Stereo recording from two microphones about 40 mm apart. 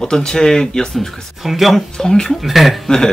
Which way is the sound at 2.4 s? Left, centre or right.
Centre.